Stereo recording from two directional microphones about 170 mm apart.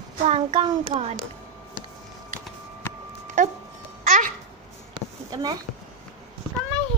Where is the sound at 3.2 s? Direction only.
50° right (ahead or behind).